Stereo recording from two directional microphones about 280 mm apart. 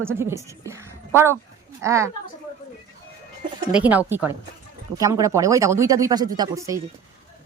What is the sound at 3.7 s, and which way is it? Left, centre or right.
Speech, centre.